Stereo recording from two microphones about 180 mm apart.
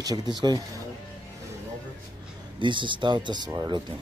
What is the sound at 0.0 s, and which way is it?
Speech, 20° right (ahead or behind).